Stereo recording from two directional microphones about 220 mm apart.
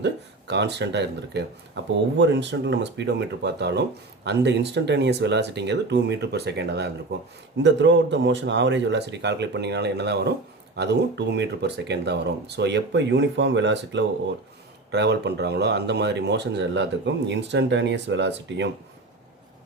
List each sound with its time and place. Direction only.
0.0 s speech: 50° right (ahead or behind)